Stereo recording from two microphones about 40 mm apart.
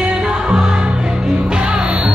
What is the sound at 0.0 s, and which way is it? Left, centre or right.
Music, right.